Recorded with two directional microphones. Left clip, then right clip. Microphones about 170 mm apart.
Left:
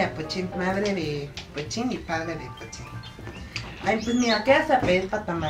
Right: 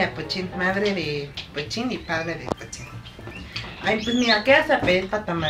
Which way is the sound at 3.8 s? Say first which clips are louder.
Right 3 dB; centre (ahead or behind).